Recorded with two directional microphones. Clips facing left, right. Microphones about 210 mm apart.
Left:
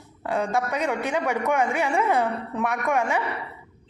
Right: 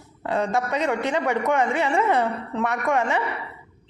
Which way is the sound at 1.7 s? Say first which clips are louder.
Right 1 dB; 15° left (ahead or behind).